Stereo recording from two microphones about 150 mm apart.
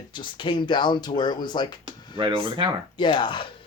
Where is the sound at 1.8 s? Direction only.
35° right (ahead or behind).